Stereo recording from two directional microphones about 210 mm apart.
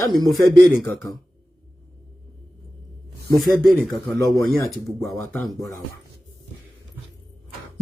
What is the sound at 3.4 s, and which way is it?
Speech, centre (ahead or behind).